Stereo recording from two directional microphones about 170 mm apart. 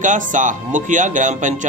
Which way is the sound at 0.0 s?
50° right (ahead or behind).